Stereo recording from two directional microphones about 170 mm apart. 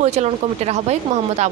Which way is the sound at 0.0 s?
40° right (ahead or behind).